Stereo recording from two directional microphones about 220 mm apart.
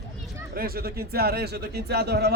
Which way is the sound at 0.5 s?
45° right (ahead or behind).